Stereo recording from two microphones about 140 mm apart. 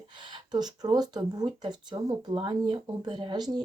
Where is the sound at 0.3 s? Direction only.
30° right (ahead or behind).